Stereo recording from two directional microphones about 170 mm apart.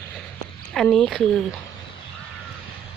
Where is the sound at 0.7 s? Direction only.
5° left (ahead or behind).